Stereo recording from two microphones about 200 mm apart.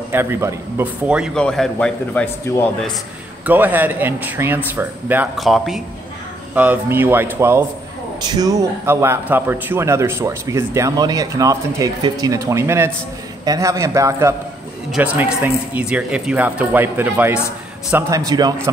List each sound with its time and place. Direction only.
0.1 s a man's voice: 10° right (ahead or behind); by 2.7 s 10° left (ahead or behind)
3.4 s a man's voice: 10° right (ahead or behind)